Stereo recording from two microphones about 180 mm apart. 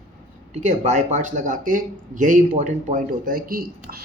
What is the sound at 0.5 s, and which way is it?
Speech, 40° right (ahead or behind).